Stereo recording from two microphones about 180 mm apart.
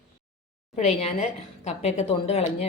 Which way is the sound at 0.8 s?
35° left (ahead or behind).